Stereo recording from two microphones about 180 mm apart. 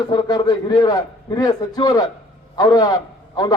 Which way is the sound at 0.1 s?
20° left (ahead or behind).